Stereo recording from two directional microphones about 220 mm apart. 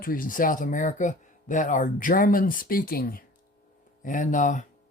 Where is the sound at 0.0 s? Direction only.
40° left (ahead or behind).